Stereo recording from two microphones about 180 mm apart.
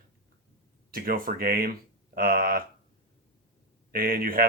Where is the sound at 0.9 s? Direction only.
55° right (ahead or behind).